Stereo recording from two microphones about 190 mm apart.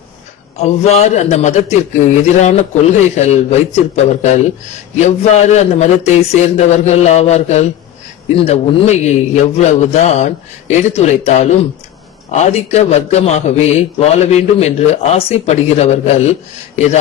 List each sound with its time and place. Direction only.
0.6 s a man's voice: 35° left (ahead or behind)